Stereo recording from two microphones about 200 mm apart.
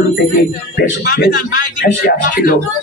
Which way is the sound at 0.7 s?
50° left (ahead or behind).